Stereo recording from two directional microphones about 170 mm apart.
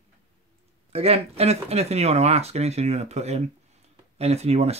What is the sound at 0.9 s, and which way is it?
Speech, 35° right (ahead or behind).